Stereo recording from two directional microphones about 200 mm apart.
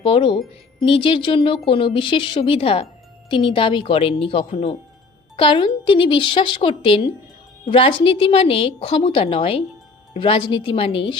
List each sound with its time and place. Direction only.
0.0 s a woman's voice: 25° left (ahead or behind)